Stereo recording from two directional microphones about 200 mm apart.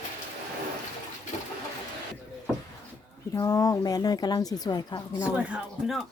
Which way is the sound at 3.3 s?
15° left (ahead or behind).